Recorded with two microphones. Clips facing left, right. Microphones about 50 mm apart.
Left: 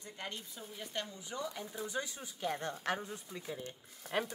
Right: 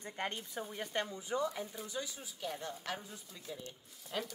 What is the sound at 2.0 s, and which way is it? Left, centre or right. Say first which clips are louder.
Speech: left 2 dB; left.